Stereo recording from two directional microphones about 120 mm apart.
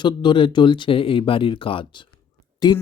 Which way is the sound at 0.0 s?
40° left (ahead or behind).